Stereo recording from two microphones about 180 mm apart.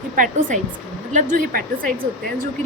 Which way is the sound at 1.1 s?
45° right (ahead or behind).